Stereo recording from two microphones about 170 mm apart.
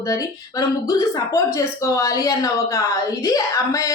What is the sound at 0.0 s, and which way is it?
Speech, 20° left (ahead or behind).